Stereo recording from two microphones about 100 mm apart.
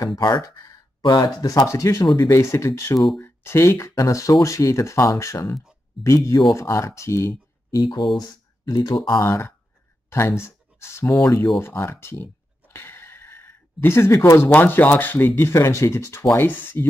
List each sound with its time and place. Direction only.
0.2 s speech: 40° left (ahead or behind)
8.2 s speech: 40° left (ahead or behind)
9.2 s speech: 30° left (ahead or behind)
11.6 s a sound: 25° left (ahead or behind)
14.5 s speech: 20° left (ahead or behind)